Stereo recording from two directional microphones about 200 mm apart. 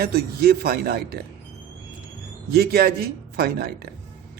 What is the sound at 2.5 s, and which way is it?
A man's voice, 50° right (ahead or behind).